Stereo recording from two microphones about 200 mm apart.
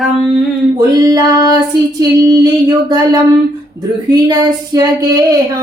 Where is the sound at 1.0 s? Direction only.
15° right (ahead or behind).